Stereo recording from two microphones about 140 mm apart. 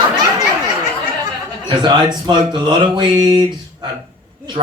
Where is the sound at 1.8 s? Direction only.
30° right (ahead or behind).